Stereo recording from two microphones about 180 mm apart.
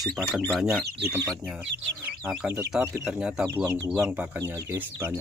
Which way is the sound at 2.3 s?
5° right (ahead or behind).